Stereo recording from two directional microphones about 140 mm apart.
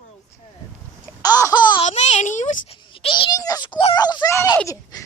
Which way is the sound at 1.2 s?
25° left (ahead or behind).